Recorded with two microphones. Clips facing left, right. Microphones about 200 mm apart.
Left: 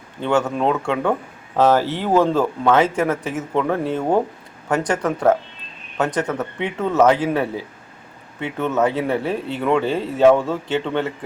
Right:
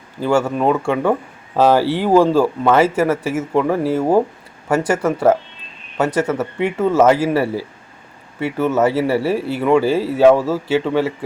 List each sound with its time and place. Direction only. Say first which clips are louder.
0.2 s speech: right 3 dB; 10° right (ahead or behind)